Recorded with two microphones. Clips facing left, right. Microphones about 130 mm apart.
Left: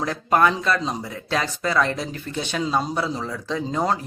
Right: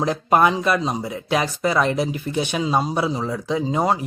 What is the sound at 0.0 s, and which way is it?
Speech, 20° right (ahead or behind).